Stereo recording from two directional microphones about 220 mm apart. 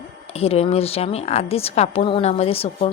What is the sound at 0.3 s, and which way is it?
A woman's voice, 30° left (ahead or behind).